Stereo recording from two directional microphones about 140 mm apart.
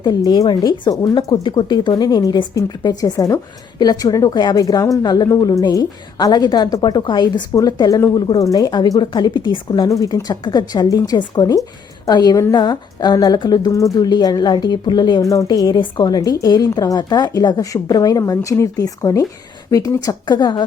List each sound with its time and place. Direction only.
0.0 s a woman's voice: 30° left (ahead or behind)